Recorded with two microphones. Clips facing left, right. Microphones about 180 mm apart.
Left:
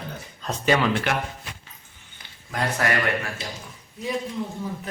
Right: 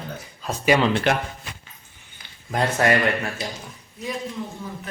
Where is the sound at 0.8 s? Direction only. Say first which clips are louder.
Right 3 dB; 25° right (ahead or behind).